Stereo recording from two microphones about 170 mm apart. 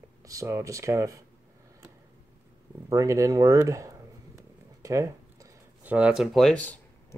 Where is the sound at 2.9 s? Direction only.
20° right (ahead or behind).